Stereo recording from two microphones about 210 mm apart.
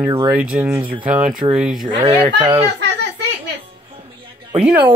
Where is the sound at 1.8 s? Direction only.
20° right (ahead or behind).